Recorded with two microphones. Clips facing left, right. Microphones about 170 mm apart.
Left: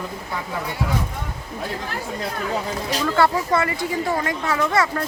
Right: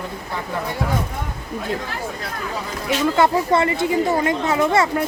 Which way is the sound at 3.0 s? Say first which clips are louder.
Right 2 dB; 25° right (ahead or behind).